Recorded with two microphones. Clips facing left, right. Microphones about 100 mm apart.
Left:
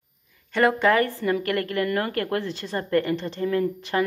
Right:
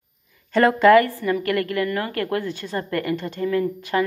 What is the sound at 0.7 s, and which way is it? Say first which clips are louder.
A woman's voice: right 6 dB; 25° left (ahead or behind).